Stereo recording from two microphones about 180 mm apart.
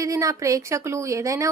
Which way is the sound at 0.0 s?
15° right (ahead or behind).